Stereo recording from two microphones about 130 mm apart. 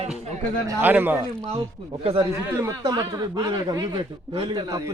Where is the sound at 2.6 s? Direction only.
30° right (ahead or behind).